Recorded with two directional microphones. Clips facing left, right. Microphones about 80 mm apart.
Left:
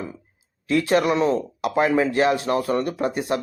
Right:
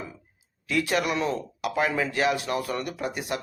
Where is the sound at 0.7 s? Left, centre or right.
Left.